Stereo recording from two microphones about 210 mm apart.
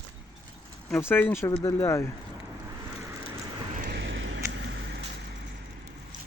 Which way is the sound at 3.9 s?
60° right (ahead or behind).